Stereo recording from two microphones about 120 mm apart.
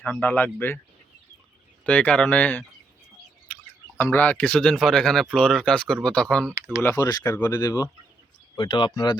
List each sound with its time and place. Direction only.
0.0 s speech: 15° left (ahead or behind)
1.8 s speech: 10° left (ahead or behind)
6.8 s speech: 30° left (ahead or behind)
8.5 s speech: 45° left (ahead or behind)